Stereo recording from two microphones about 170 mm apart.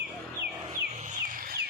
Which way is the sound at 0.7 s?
45° right (ahead or behind).